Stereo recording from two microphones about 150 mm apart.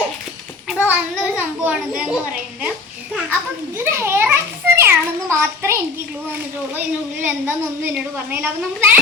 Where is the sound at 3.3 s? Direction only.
15° right (ahead or behind).